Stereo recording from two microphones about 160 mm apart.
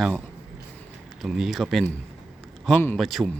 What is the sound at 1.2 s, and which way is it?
Speech, centre (ahead or behind).